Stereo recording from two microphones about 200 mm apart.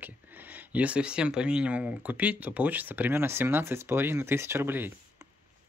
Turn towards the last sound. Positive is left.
turn(degrees=-10)  # may be behind; listen again after turning